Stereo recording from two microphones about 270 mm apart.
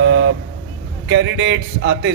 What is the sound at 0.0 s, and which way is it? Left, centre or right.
Vehicle, right.